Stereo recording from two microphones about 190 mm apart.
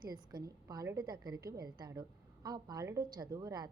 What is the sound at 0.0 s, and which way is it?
Speech, 20° right (ahead or behind).